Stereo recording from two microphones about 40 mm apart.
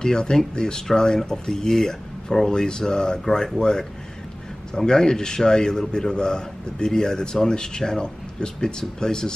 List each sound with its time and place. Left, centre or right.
0.0 s a man's voice: centre